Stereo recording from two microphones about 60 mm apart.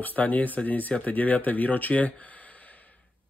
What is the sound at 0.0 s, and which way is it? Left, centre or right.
Speech, left.